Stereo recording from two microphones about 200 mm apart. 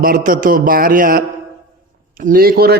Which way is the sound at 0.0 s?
45° right (ahead or behind).